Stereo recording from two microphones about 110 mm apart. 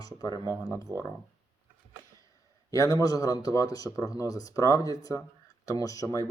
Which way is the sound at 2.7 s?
35° left (ahead or behind).